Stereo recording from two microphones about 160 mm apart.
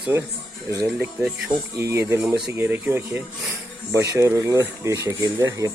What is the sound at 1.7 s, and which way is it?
Speech, 15° right (ahead or behind).